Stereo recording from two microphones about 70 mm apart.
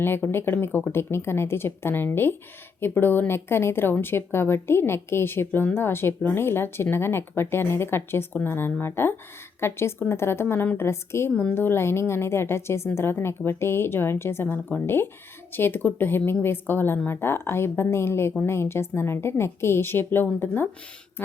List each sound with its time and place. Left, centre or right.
0.0 s a woman's voice: left